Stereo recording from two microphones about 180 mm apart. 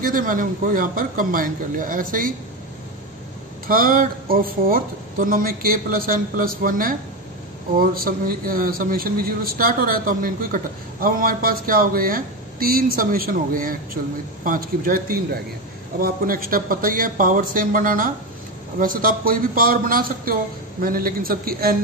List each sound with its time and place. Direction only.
0.0 s a man's voice: 50° right (ahead or behind)
3.6 s a man's voice: 55° right (ahead or behind)